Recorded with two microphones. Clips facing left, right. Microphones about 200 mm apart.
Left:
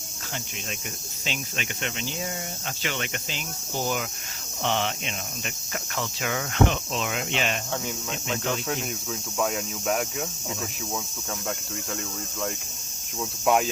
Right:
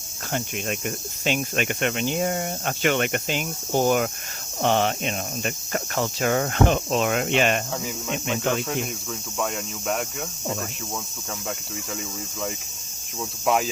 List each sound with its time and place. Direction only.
0.3 s cricket: 55° right (ahead or behind)
7.7 s speech: 5° right (ahead or behind)
13.4 s speech: centre (ahead or behind)